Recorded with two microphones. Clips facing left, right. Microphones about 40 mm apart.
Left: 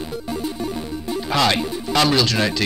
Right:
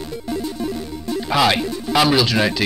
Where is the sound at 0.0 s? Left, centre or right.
Centre.